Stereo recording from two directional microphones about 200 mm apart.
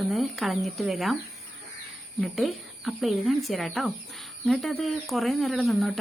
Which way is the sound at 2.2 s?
Centre (ahead or behind).